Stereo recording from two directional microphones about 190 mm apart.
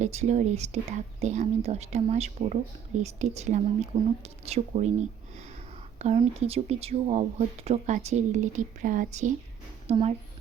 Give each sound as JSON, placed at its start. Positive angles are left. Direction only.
{"t": 0.0, "sound": "speech", "side_deg": -35}